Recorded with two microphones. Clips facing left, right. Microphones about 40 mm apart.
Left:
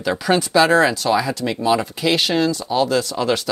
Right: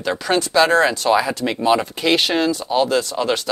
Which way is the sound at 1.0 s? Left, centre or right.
Centre.